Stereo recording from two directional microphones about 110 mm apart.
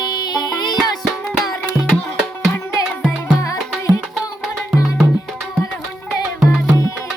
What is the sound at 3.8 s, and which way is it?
Music, 30° left (ahead or behind).